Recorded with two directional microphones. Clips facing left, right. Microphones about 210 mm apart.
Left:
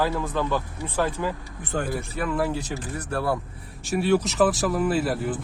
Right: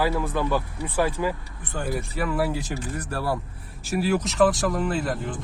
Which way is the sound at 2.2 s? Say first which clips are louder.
Even; 5° right (ahead or behind).